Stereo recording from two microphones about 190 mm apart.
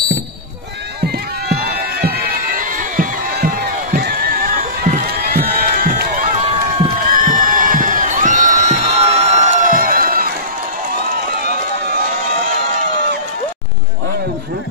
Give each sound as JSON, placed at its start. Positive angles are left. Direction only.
{"t": 1.0, "sound": "run", "side_deg": -55}
{"t": 7.1, "sound": "crowd", "side_deg": -45}